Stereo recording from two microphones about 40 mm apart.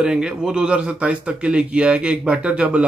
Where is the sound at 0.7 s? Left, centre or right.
Right.